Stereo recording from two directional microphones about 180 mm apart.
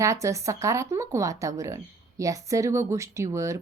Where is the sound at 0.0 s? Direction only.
15° right (ahead or behind).